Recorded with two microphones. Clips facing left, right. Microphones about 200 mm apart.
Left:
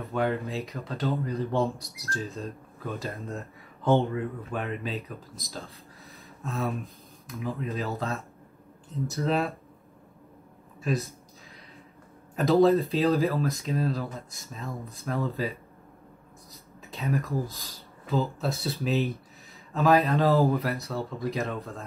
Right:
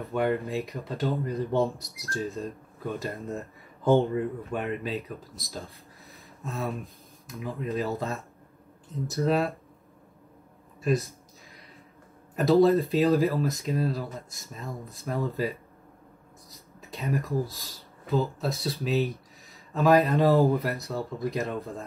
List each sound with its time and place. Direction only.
0.0 s speech: centre (ahead or behind)
0.7 s speech: 15° right (ahead or behind)
1.5 s speech: centre (ahead or behind)
3.2 s speech: 15° right (ahead or behind)
4.0 s speech: centre (ahead or behind)
10.8 s speech: centre (ahead or behind)
12.4 s speech: centre (ahead or behind)
16.9 s speech: centre (ahead or behind)